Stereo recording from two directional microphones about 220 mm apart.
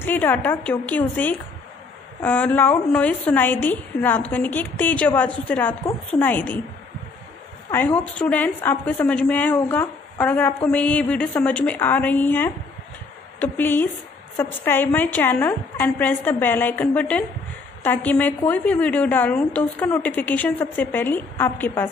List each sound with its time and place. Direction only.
0.0 s a woman's voice: 10° left (ahead or behind)
7.7 s a woman's voice: 5° left (ahead or behind)